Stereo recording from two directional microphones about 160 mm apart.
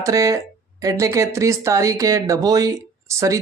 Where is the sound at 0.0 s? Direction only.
20° right (ahead or behind).